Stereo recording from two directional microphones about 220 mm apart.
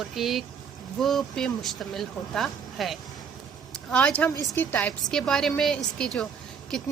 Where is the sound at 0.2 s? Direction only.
Centre (ahead or behind).